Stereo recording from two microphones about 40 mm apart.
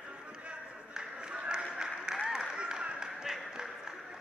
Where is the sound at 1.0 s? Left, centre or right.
Right.